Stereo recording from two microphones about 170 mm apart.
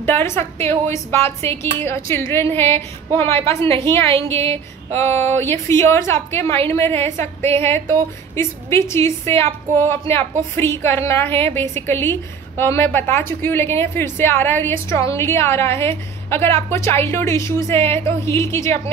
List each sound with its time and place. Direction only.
0.0 s a woman's voice: 15° left (ahead or behind)
4.9 s a woman's voice: 15° left (ahead or behind)